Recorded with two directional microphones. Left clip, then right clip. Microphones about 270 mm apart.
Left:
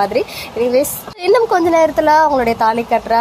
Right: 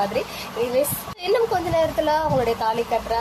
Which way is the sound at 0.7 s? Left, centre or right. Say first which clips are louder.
Left 7 dB; left.